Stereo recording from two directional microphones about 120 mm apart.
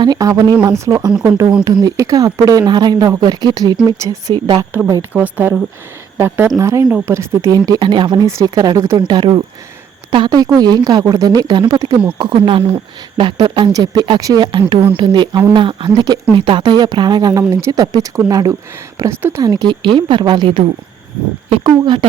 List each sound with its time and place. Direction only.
0.0 s speech: 30° right (ahead or behind)
4.4 s speech: 40° right (ahead or behind)
5.1 s speech: 15° right (ahead or behind); by 12.4 s 40° right (ahead or behind)
12.4 s speech: 55° right (ahead or behind); by 22.0 s 35° right (ahead or behind)